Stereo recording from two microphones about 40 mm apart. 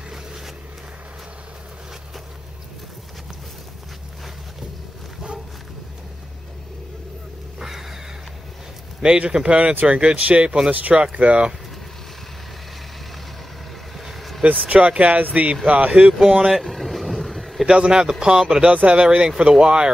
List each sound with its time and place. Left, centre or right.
7.5 s vehicle: centre
9.3 s speech: right
10.7 s speech: right
14.0 s vehicle: centre
14.7 s speech: right
16.0 s speech: centre
16.5 s boat: centre
17.6 s speech: centre
18.7 s speech: right